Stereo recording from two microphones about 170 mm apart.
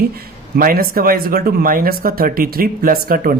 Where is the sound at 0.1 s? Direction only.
60° right (ahead or behind).